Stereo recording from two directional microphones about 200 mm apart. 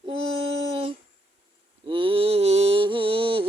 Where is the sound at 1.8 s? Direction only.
25° right (ahead or behind).